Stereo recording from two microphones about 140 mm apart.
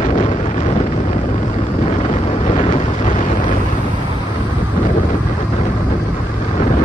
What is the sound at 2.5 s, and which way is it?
Vehicle, 55° left (ahead or behind).